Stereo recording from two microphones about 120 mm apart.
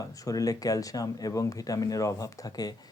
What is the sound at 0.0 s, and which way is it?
Speech, 30° left (ahead or behind).